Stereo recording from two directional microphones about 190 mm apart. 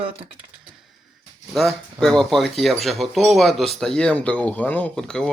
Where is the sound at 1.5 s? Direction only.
Centre (ahead or behind).